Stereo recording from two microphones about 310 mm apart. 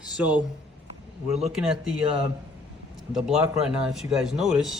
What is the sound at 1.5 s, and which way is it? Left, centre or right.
Speech, centre.